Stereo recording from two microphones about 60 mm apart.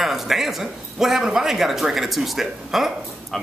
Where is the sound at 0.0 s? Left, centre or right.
Centre.